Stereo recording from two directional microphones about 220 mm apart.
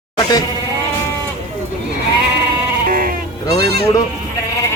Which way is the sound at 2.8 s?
40° right (ahead or behind).